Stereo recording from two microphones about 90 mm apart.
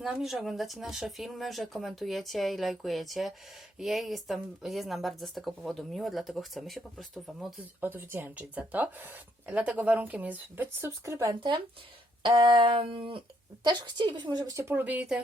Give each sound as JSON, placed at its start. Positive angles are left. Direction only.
{"t": 0.0, "sound": "speech", "side_deg": -5}
{"t": 7.8, "sound": "speech", "side_deg": -20}
{"t": 12.2, "sound": "a sound", "side_deg": -65}
{"t": 13.7, "sound": "a woman's voice", "side_deg": -55}
{"t": 14.5, "sound": "speech", "side_deg": -25}